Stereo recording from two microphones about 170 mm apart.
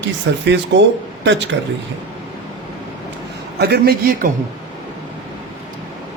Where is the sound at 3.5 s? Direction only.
70° right (ahead or behind).